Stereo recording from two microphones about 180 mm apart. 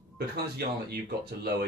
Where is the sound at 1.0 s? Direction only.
60° right (ahead or behind).